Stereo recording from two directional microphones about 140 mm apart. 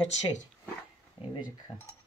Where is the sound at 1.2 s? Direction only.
40° left (ahead or behind).